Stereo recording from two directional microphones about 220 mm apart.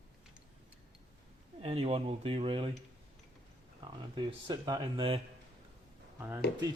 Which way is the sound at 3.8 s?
20° right (ahead or behind).